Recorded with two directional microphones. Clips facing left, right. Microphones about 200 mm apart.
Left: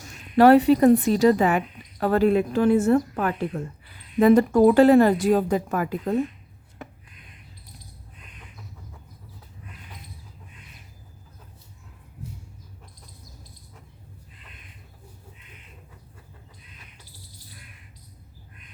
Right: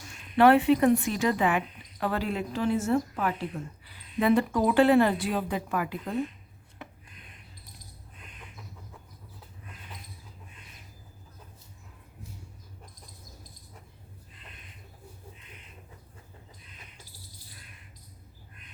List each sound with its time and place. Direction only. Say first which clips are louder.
0.3 s speech: left 5 dB; 40° left (ahead or behind)